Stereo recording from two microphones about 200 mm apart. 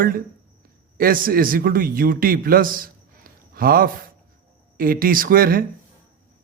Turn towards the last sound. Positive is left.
turn(degrees=-45)  # may be behind; listen again after turning